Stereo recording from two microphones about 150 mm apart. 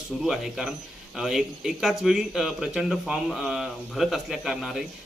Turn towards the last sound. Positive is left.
turn(degrees=0)  # may be behind; listen again after turning